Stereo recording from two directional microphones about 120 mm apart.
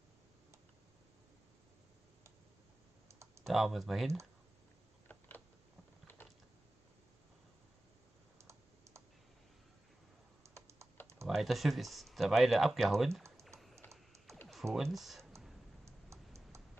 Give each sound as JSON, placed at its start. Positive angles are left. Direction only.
{"t": 3.4, "sound": "speech", "side_deg": 0}
{"t": 8.4, "sound": "computer keyboard", "side_deg": -25}
{"t": 10.4, "sound": "computer keyboard", "side_deg": -25}
{"t": 11.2, "sound": "speech", "side_deg": 0}
{"t": 13.6, "sound": "music", "side_deg": 0}
{"t": 14.5, "sound": "speech", "side_deg": 0}
{"t": 15.8, "sound": "tick-tock", "side_deg": -25}